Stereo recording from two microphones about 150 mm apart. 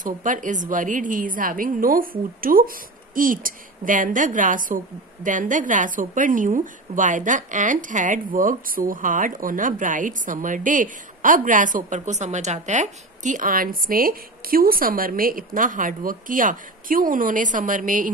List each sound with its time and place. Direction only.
0.0 s a woman's voice: 60° right (ahead or behind)